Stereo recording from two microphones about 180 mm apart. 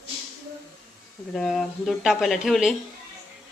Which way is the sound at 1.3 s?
Centre (ahead or behind).